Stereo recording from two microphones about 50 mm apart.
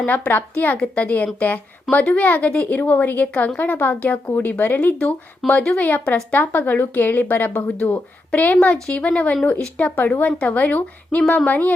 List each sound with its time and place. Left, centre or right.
0.1 s a woman's voice: left
5.5 s a woman's voice: left
7.8 s a woman's voice: left